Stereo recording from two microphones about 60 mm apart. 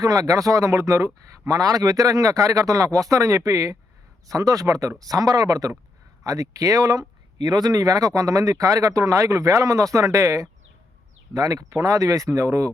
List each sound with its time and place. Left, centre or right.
0.0 s speech: right
1.5 s speech: right
6.2 s speech: right
7.6 s speech: right
11.3 s speech: right